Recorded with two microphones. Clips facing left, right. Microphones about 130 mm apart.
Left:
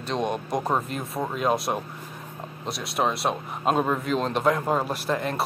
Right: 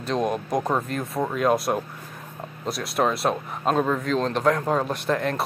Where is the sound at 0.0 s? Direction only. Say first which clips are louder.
Right 2 dB; centre (ahead or behind).